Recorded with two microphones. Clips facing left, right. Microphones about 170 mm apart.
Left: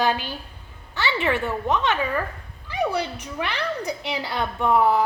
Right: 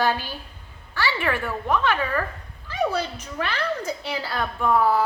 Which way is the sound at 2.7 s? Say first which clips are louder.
Even; 15° left (ahead or behind).